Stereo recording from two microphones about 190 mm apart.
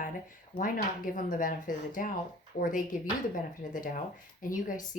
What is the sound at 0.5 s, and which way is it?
Speech, 45° left (ahead or behind).